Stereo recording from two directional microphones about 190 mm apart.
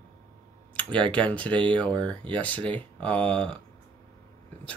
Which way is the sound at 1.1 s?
5° left (ahead or behind).